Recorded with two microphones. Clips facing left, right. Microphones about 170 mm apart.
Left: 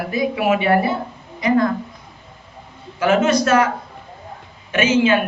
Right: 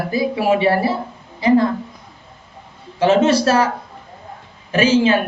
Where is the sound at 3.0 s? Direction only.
30° right (ahead or behind).